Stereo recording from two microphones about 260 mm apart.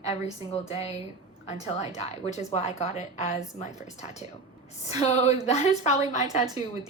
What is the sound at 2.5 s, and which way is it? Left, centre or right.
Speech, left.